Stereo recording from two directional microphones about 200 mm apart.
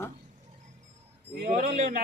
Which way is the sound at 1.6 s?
40° right (ahead or behind).